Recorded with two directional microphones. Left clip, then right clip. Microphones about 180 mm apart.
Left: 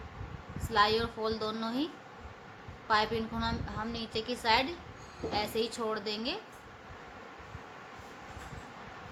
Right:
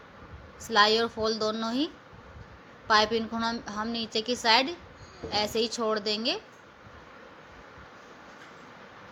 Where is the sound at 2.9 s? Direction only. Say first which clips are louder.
Right 6 dB; 35° right (ahead or behind).